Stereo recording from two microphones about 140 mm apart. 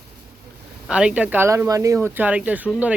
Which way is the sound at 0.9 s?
5° right (ahead or behind).